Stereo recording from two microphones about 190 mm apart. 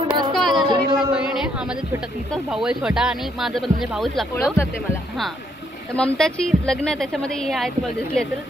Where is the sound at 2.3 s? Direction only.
5° right (ahead or behind).